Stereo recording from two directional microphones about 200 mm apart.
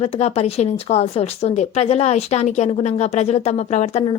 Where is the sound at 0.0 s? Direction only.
30° left (ahead or behind).